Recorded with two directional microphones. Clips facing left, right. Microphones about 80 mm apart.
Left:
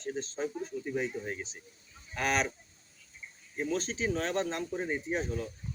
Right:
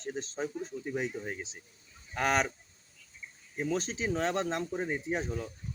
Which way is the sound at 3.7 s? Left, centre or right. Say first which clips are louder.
Even; right.